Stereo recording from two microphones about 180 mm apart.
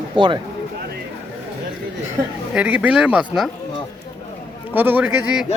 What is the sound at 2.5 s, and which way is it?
Speech, 5° right (ahead or behind).